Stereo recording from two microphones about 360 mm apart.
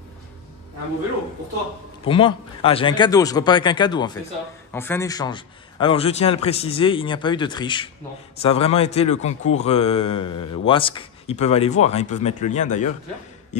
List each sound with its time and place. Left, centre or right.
2.0 s a man's voice: centre